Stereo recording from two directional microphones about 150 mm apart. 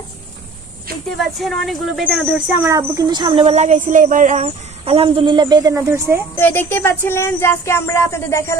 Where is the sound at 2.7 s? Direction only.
20° right (ahead or behind).